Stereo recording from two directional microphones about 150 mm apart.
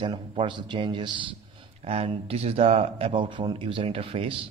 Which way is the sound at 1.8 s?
45° right (ahead or behind).